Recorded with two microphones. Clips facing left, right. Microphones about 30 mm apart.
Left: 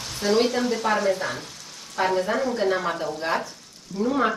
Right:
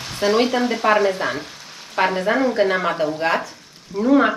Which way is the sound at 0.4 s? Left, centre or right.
Right.